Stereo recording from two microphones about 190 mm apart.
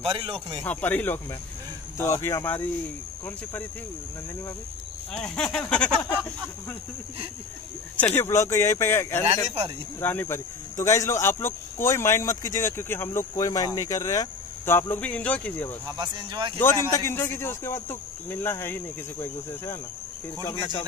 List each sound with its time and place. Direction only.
0.0 s speech: 30° right (ahead or behind)
0.7 s speech: 10° left (ahead or behind)
5.1 s speech: 5° left (ahead or behind)
8.0 s speech: 10° left (ahead or behind)
16.0 s speech: 25° right (ahead or behind)
16.5 s speech: 15° left (ahead or behind)